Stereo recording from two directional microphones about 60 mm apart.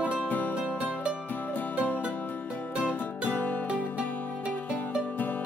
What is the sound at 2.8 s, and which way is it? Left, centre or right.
Music, left.